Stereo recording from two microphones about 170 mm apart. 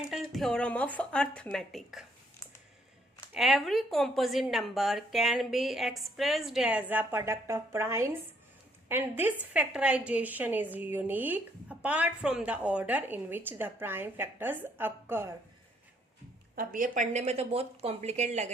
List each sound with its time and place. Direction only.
0.1 s a woman's voice: centre (ahead or behind)
3.3 s a woman's voice: centre (ahead or behind)
16.6 s speech: 50° right (ahead or behind)